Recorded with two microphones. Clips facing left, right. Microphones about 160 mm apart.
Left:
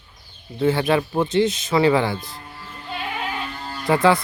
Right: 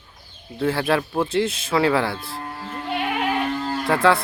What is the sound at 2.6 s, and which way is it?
Music, 70° right (ahead or behind).